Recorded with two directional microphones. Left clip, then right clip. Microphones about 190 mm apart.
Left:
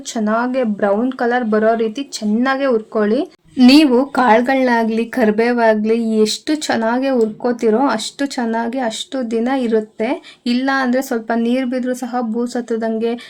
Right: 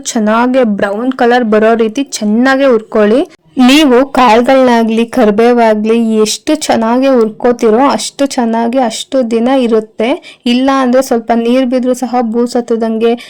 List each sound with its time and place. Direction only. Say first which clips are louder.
0.1 s speech: right 8 dB; 45° right (ahead or behind)